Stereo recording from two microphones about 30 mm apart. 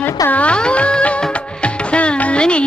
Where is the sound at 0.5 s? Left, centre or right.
Left.